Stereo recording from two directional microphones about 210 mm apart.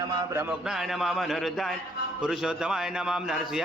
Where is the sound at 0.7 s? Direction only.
Centre (ahead or behind).